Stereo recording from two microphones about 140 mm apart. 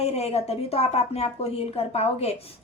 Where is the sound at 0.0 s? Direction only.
45° left (ahead or behind).